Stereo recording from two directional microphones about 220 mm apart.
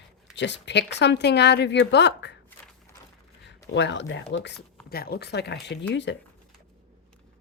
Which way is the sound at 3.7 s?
55° left (ahead or behind).